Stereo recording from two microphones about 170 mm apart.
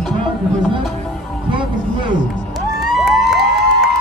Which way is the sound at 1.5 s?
30° right (ahead or behind).